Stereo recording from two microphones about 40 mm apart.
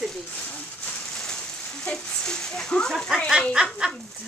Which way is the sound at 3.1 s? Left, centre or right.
Centre.